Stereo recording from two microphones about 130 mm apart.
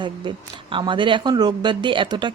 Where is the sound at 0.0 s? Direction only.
40° right (ahead or behind).